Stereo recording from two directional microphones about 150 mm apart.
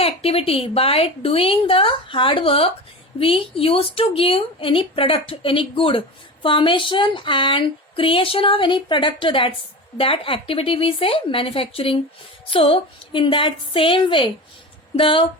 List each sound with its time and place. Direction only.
0.0 s speech: 40° left (ahead or behind)